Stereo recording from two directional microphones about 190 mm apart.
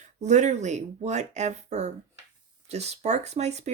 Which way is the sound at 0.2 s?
40° right (ahead or behind).